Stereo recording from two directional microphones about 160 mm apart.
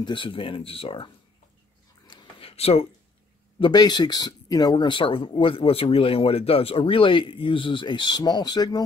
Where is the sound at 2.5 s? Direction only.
40° left (ahead or behind).